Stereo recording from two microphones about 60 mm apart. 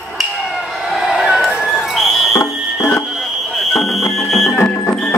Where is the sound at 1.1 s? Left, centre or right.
Centre.